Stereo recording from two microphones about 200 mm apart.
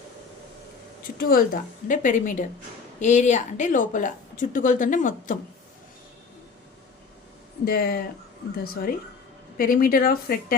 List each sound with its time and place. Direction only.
1.2 s a woman's voice: 50° left (ahead or behind)
7.6 s a woman's voice: 50° left (ahead or behind)